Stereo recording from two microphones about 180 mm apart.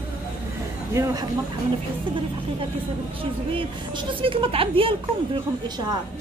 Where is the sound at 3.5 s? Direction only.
25° right (ahead or behind).